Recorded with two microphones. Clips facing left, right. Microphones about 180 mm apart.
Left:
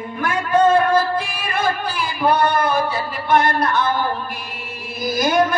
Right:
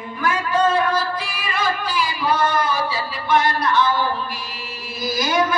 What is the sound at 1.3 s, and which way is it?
Music, 55° left (ahead or behind).